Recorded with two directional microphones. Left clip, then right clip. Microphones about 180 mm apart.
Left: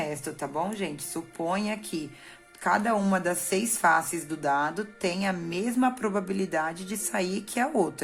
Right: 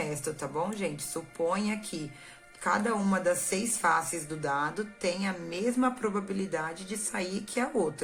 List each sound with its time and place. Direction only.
0.0 s a woman's voice: 35° left (ahead or behind)